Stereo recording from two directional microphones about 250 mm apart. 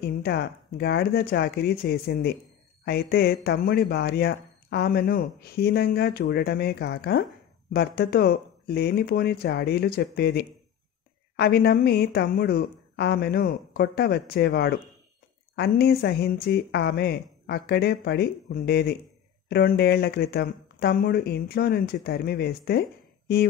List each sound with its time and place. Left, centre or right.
0.0 s speech: left